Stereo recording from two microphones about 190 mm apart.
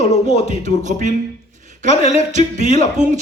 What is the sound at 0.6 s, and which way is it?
Speech, 40° right (ahead or behind).